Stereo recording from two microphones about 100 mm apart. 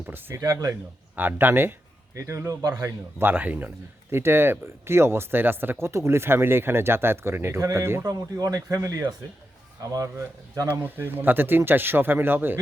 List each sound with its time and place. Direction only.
0.0 s speech: 20° right (ahead or behind)
0.4 s speech: 35° right (ahead or behind)
1.1 s speech: 20° right (ahead or behind)
8.0 s speech: 40° right (ahead or behind)
10.7 s speech: 20° right (ahead or behind)